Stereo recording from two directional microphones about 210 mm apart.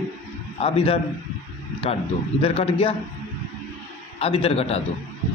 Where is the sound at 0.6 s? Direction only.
30° left (ahead or behind).